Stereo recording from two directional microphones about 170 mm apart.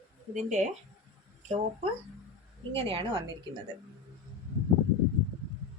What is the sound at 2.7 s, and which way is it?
Speech, 30° right (ahead or behind).